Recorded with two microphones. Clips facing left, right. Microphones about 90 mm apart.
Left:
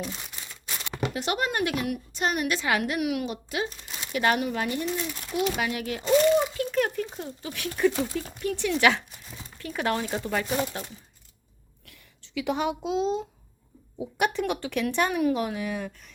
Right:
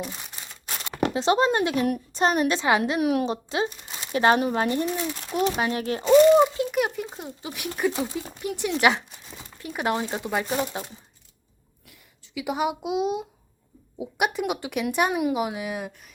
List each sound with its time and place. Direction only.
0.0 s speech: 15° right (ahead or behind)
1.1 s a woman's voice: 25° right (ahead or behind)
4.9 s a woman's voice: 25° right (ahead or behind)
6.6 s a woman's voice: 15° right (ahead or behind)
10.4 s speech: 5° right (ahead or behind)
11.9 s speech: 15° right (ahead or behind)